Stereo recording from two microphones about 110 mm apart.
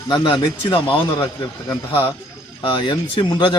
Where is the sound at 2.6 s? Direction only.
50° left (ahead or behind).